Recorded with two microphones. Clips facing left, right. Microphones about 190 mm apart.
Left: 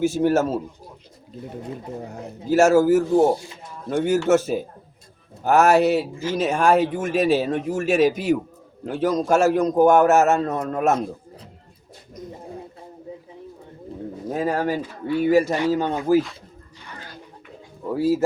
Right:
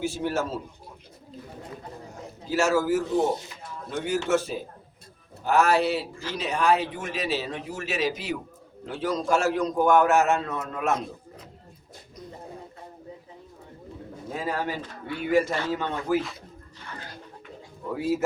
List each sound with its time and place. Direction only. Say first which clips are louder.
0.0 s a man's voice: left 9 dB; 45° left (ahead or behind)
2.5 s a man's voice: left 8 dB; 45° left (ahead or behind)
4.3 s a man's voice: left 7 dB; 45° left (ahead or behind)
14.3 s a man's voice: left 7 dB; 45° left (ahead or behind)
17.9 s speech: left 6 dB; 35° left (ahead or behind)